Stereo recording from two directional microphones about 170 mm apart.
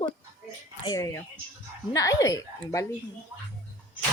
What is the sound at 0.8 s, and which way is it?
Speech, 20° left (ahead or behind).